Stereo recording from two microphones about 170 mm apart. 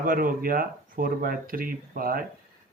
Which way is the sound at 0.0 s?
55° right (ahead or behind).